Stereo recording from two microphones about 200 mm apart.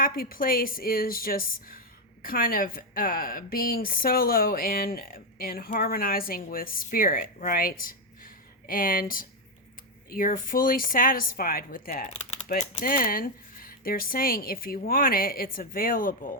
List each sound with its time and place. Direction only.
0.0 s a woman's voice: 45° left (ahead or behind)
12.1 s typing: 30° left (ahead or behind)
12.8 s a woman's voice: 45° left (ahead or behind)